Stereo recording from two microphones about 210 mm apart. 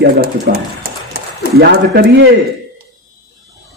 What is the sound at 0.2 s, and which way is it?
Speech, 45° right (ahead or behind).